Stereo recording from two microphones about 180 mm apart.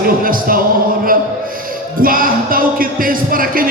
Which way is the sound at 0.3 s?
50° right (ahead or behind).